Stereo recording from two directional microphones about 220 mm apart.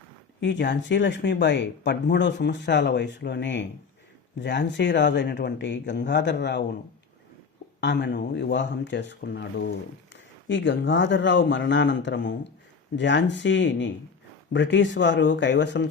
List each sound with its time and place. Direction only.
0.3 s speech: 55° left (ahead or behind)
7.8 s speech: 50° left (ahead or behind)